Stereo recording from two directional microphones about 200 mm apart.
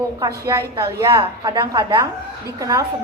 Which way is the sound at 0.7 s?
25° right (ahead or behind).